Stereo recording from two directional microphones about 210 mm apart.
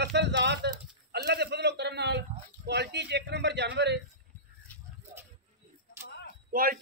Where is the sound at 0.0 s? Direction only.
55° right (ahead or behind).